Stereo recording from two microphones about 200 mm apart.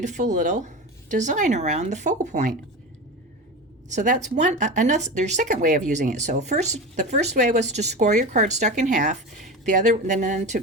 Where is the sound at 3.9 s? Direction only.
40° right (ahead or behind).